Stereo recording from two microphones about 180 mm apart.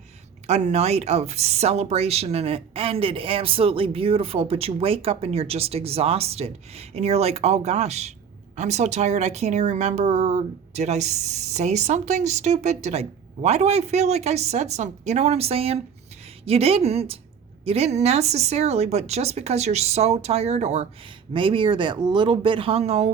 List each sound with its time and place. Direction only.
0.4 s speech: 35° right (ahead or behind)
21.3 s speech: 30° right (ahead or behind)